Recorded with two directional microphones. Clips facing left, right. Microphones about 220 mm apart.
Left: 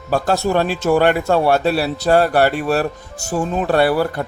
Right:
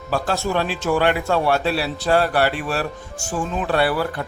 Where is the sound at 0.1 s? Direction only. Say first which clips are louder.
Left 5 dB; 45° left (ahead or behind).